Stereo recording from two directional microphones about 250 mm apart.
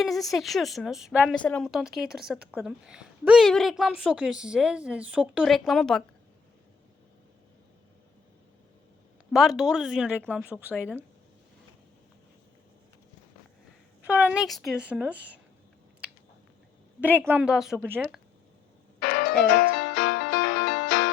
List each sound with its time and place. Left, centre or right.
0.0 s a woman's voice: centre
9.3 s a woman's voice: centre
14.0 s a woman's voice: centre
17.0 s a woman's voice: centre
18.9 s music: left